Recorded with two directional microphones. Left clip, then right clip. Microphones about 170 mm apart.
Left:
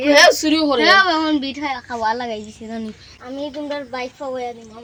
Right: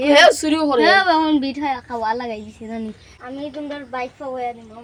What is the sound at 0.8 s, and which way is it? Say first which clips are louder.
Speech: even; 35° right (ahead or behind).